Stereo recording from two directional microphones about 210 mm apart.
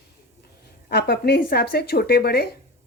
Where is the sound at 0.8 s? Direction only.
50° left (ahead or behind).